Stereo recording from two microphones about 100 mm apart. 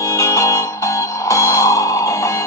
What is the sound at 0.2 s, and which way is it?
Music, 30° left (ahead or behind).